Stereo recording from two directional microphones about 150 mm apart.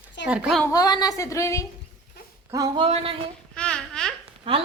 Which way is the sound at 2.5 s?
25° right (ahead or behind).